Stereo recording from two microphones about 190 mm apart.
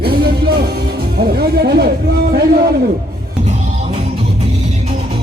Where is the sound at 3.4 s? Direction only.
35° right (ahead or behind).